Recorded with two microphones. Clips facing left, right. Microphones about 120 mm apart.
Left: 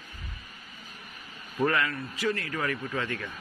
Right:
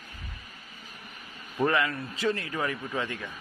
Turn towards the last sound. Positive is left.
turn(degrees=-15)  # may be behind; listen again after turning